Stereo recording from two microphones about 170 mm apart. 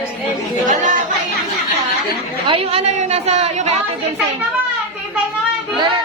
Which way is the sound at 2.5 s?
35° right (ahead or behind).